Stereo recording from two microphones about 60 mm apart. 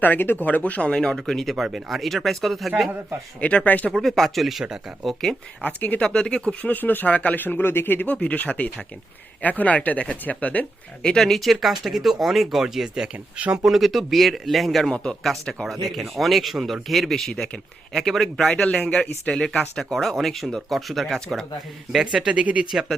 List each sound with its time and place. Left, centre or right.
0.0 s speech: left; by 1.5 s centre
1.5 s speech: centre
3.4 s speech: left
3.9 s speech: centre
5.6 s speech: left
6.0 s speech: centre
6.6 s speech: left
8.0 s speech: left
11.0 s speech: centre
13.7 s speech: centre
18.4 s speech: centre
19.8 s speech: centre
22.0 s speech: centre
22.7 s speech: centre